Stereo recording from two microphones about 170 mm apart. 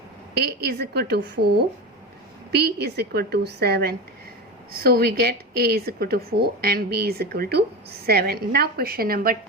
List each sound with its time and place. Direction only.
0.3 s a woman's voice: 70° right (ahead or behind)